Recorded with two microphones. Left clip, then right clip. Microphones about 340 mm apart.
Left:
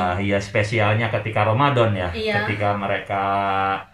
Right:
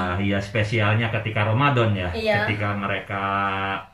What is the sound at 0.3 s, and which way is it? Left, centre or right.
Speech, centre.